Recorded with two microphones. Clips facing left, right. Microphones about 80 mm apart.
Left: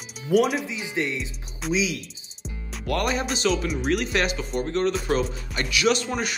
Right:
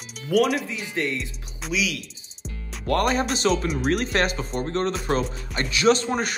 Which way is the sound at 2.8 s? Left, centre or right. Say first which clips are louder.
Right 3 dB; right.